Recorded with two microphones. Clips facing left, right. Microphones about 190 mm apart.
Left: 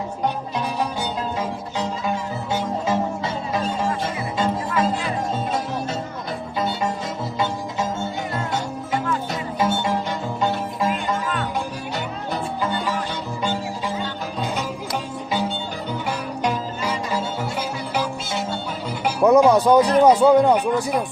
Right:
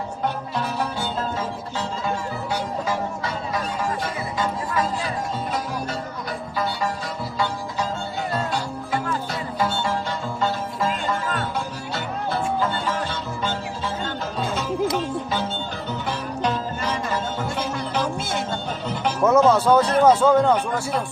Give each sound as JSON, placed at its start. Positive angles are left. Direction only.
{"t": 1.4, "sound": "music", "side_deg": 15}
{"t": 9.6, "sound": "music", "side_deg": 20}
{"t": 14.4, "sound": "music", "side_deg": 15}
{"t": 18.9, "sound": "speech", "side_deg": 10}